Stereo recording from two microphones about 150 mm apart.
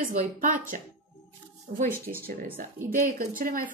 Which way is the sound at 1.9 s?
15° right (ahead or behind).